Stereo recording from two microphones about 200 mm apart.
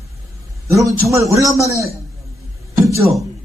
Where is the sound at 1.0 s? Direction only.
15° right (ahead or behind).